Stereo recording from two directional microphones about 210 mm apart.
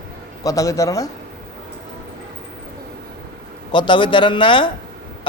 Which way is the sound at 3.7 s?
20° left (ahead or behind).